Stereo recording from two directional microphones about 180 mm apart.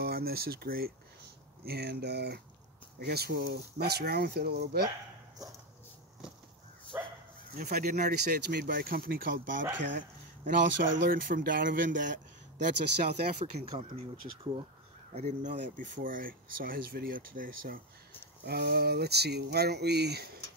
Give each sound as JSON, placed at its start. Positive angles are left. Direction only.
{"t": 0.0, "sound": "speech", "side_deg": -60}
{"t": 6.9, "sound": "bow-wow", "side_deg": -10}
{"t": 7.5, "sound": "speech", "side_deg": -50}
{"t": 11.1, "sound": "speech", "side_deg": -50}
{"t": 12.5, "sound": "speech", "side_deg": -70}
{"t": 13.7, "sound": "speech", "side_deg": -30}
{"t": 15.1, "sound": "speech", "side_deg": -40}